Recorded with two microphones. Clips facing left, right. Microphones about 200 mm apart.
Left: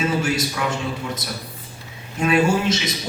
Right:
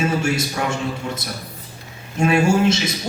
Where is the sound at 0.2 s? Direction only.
25° right (ahead or behind).